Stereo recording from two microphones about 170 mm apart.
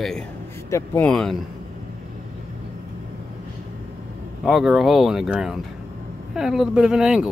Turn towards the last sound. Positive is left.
turn(degrees=-5)  # may be behind; listen again after turning